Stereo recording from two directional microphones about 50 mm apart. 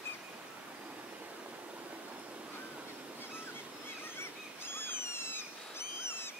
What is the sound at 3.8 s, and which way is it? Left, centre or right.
Owl, left.